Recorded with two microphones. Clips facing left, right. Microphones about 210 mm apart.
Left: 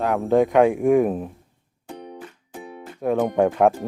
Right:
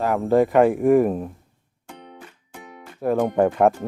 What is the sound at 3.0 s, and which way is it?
Speech, centre (ahead or behind).